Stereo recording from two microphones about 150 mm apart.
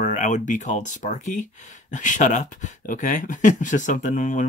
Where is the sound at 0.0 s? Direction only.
55° left (ahead or behind).